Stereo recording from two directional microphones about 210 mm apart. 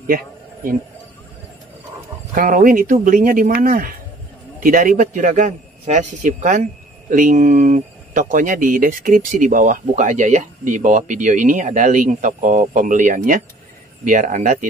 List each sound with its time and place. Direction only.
2.3 s a man's voice: 40° right (ahead or behind)